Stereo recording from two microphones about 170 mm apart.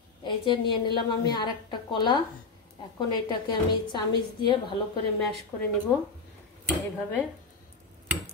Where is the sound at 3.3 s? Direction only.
25° left (ahead or behind).